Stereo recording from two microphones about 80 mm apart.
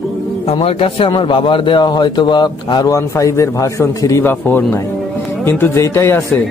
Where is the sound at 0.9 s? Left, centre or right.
Left.